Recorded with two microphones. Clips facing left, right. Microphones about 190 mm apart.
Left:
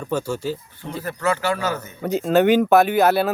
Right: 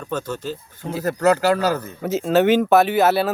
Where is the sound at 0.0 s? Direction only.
10° left (ahead or behind).